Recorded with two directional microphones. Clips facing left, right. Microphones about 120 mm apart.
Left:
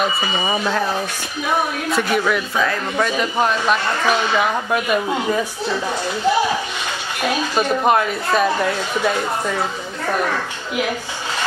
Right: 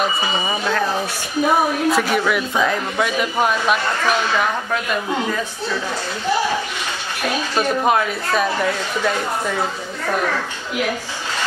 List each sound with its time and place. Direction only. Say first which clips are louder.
0.5 s speech: left 2 dB; 10° left (ahead or behind)
1.9 s speech: right 1 dB; centre (ahead or behind)
2.5 s speech: right 1 dB; 15° right (ahead or behind)
3.0 s speech: left 1 dB; 5° right (ahead or behind); by 5.4 s 10° left (ahead or behind)
7.5 s speech: left 1 dB; centre (ahead or behind)